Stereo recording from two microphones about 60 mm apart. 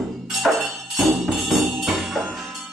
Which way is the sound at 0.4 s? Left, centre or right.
Centre.